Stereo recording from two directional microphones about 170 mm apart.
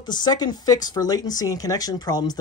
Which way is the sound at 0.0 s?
25° left (ahead or behind).